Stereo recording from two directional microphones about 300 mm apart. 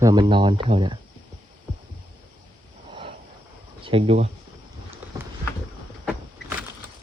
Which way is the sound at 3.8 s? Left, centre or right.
Centre.